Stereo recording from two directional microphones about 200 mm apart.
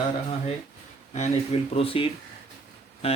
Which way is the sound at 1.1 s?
35° left (ahead or behind).